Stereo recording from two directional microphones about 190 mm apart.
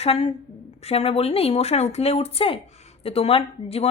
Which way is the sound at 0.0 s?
30° left (ahead or behind).